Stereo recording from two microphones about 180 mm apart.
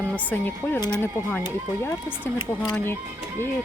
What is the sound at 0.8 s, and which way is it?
Speech, 20° left (ahead or behind).